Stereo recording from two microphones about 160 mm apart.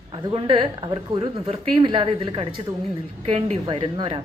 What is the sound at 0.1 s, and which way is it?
Speech, 30° right (ahead or behind).